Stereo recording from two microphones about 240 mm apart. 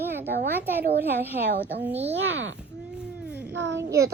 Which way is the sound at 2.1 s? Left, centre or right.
Right.